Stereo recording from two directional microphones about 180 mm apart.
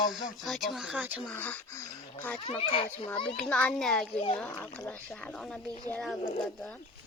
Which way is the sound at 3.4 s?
5° left (ahead or behind).